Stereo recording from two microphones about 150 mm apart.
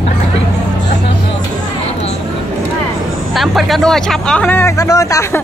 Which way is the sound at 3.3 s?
Centre (ahead or behind).